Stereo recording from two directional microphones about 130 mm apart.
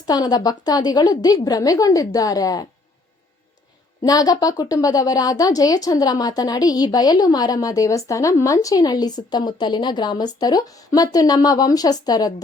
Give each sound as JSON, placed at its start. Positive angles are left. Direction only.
{"t": 0.0, "sound": "speech", "side_deg": 30}
{"t": 4.0, "sound": "speech", "side_deg": 30}